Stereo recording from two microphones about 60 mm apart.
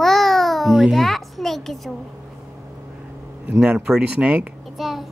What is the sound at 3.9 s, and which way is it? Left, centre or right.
Speech, centre.